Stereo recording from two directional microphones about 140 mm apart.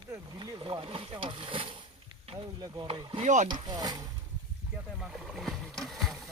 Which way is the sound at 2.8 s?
40° right (ahead or behind).